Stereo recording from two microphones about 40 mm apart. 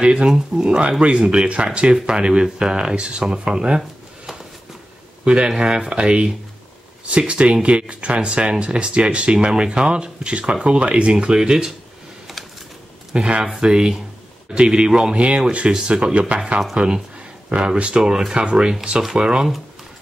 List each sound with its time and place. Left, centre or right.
0.0 s speech: right
5.2 s speech: right
11.3 s speech: centre
13.1 s speech: right
15.1 s speech: right